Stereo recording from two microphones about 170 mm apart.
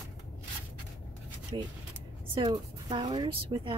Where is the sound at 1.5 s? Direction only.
30° right (ahead or behind).